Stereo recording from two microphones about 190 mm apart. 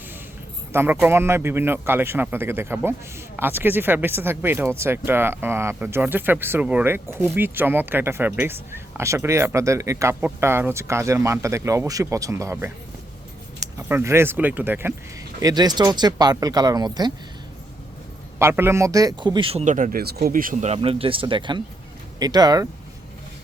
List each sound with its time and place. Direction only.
0.7 s speech: 10° right (ahead or behind)
13.7 s a man's voice: 15° right (ahead or behind)
18.3 s a man's voice: 15° right (ahead or behind)